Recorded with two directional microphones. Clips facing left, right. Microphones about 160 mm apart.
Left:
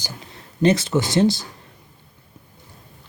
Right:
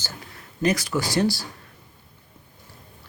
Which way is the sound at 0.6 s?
25° left (ahead or behind).